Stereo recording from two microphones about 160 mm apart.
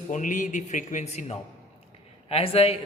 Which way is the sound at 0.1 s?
55° left (ahead or behind).